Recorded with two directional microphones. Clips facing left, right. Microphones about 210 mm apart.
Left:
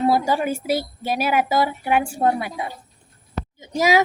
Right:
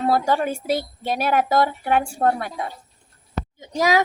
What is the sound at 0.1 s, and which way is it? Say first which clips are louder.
Speech: even; 5° left (ahead or behind).